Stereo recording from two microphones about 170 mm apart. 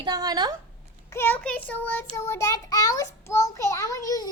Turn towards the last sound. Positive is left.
turn(degrees=20)  # may be behind; listen again after turning